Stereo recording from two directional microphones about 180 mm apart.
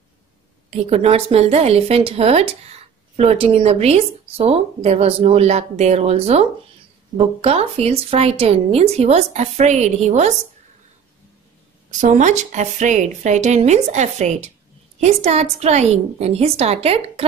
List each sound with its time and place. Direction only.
0.7 s a woman's voice: 35° right (ahead or behind)
12.0 s a woman's voice: 45° right (ahead or behind)